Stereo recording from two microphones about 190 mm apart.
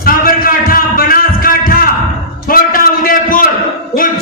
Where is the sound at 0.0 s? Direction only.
50° left (ahead or behind).